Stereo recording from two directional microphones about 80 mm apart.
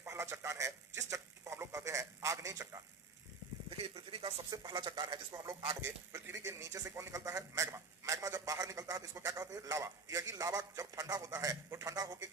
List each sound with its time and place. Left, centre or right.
0.1 s speech: right
3.7 s speech: right
4.7 s speech: right
5.8 s a man's voice: right